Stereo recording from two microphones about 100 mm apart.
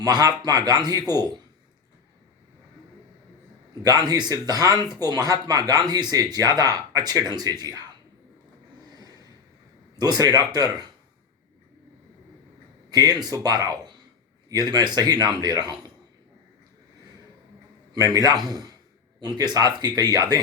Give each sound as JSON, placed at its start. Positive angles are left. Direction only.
{"t": 0.0, "sound": "speech", "side_deg": -40}
{"t": 3.8, "sound": "speech", "side_deg": -40}
{"t": 9.0, "sound": "a sound", "side_deg": -40}
{"t": 10.0, "sound": "speech", "side_deg": -40}
{"t": 12.9, "sound": "speech", "side_deg": -40}
{"t": 17.9, "sound": "speech", "side_deg": -35}